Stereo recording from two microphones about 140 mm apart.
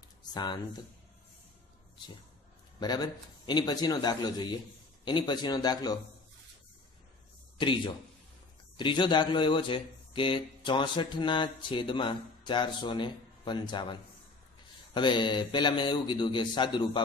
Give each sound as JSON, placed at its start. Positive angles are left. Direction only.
{"t": 0.3, "sound": "speech", "side_deg": 30}
{"t": 2.8, "sound": "a man's voice", "side_deg": 30}
{"t": 7.5, "sound": "a man's voice", "side_deg": 35}
{"t": 15.0, "sound": "speech", "side_deg": 35}